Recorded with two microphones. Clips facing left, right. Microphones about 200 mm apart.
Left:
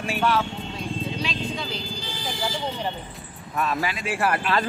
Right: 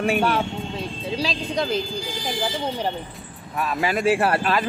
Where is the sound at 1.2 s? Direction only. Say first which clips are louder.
Right 4 dB; 40° right (ahead or behind).